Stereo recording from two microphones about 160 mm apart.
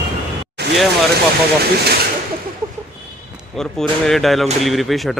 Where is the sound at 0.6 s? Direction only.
90° right.